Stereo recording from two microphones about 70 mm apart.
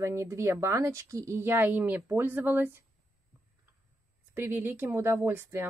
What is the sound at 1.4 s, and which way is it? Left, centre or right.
Speech, right.